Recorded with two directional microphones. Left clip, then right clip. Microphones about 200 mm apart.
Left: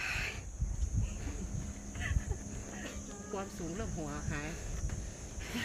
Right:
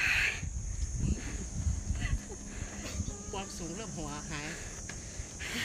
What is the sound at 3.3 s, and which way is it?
Speech, 45° left (ahead or behind).